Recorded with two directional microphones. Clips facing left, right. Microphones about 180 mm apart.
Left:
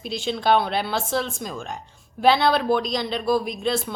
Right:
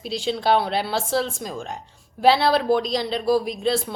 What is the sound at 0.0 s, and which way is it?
A woman's voice, 30° right (ahead or behind).